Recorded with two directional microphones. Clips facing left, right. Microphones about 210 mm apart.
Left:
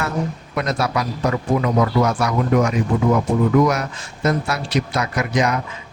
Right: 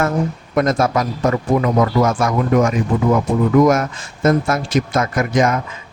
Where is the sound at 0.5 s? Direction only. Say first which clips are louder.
Right 6 dB; 50° right (ahead or behind).